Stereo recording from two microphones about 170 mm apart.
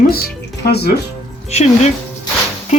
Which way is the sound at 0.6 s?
70° left (ahead or behind).